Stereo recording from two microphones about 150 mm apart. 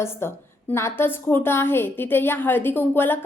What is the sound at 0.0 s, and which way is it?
A woman's voice, 15° left (ahead or behind).